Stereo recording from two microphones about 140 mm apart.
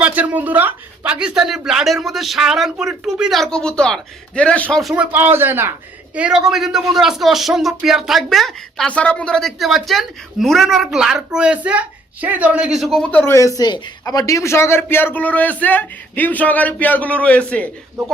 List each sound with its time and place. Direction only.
0.0 s speech: 10° right (ahead or behind); by 4.8 s 10° left (ahead or behind)
4.8 s speech: centre (ahead or behind)
5.1 s speech: 15° right (ahead or behind); by 13.3 s 10° left (ahead or behind)
13.6 s a man's voice: 30° left (ahead or behind); by 17.7 s 10° left (ahead or behind)